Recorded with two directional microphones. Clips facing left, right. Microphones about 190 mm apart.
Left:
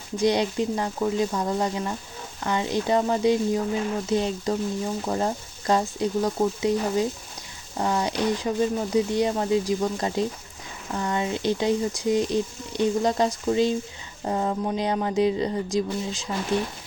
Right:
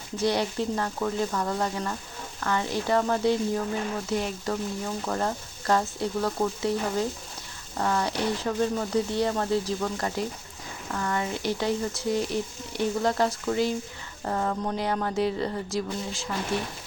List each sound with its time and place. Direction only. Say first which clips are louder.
0.2 s speech: left 4 dB; 15° left (ahead or behind)